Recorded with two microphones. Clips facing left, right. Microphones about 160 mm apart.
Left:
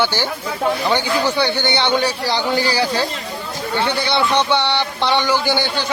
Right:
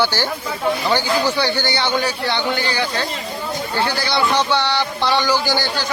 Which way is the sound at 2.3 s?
35° left (ahead or behind).